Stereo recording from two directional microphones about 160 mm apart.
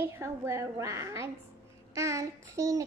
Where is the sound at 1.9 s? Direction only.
20° right (ahead or behind).